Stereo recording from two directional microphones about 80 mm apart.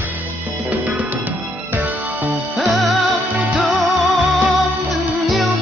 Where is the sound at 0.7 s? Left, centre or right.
Right.